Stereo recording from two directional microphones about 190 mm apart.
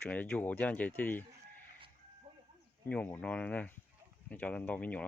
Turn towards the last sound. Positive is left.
turn(degrees=10)  # may be behind; listen again after turning